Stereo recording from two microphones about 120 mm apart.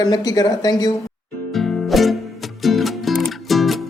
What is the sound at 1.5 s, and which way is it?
Music, centre (ahead or behind).